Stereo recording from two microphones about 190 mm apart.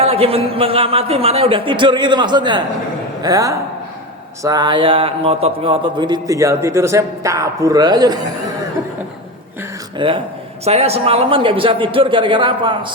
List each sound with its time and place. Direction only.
0.0 s a man's voice: 30° right (ahead or behind)
10.0 s a man's voice: 25° right (ahead or behind)